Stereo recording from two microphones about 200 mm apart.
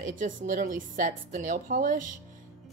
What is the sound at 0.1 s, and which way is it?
A woman's voice, 40° right (ahead or behind).